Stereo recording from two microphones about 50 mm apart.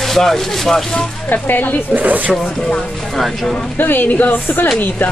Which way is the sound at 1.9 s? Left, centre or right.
Right.